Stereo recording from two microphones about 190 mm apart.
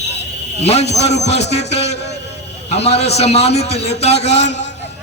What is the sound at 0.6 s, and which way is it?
Speech, 35° left (ahead or behind).